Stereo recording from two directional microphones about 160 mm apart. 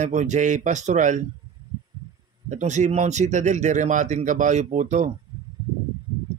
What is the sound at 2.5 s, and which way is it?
A man's voice, 50° right (ahead or behind).